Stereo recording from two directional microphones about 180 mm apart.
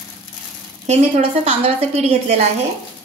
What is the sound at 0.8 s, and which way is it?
A woman's voice, 35° right (ahead or behind).